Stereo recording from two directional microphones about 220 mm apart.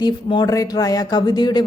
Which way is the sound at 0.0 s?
20° left (ahead or behind).